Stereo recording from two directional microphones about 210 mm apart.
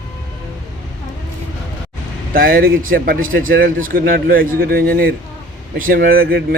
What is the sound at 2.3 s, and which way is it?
Speech, 45° right (ahead or behind).